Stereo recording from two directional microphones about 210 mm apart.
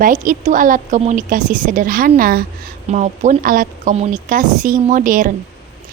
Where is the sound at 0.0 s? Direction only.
40° right (ahead or behind).